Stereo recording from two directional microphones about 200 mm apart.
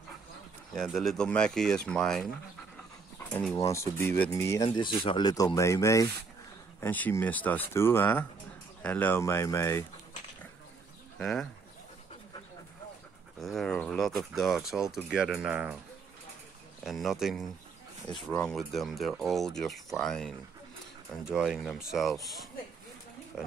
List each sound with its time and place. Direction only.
0.7 s speech: centre (ahead or behind)
3.3 s speech: 10° left (ahead or behind)
4.6 s speech: 25° left (ahead or behind)
11.1 s speech: centre (ahead or behind)
13.4 s speech: centre (ahead or behind)
16.8 s speech: centre (ahead or behind)